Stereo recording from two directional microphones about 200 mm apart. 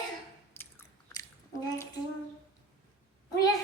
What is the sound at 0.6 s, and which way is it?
Biting, 15° left (ahead or behind).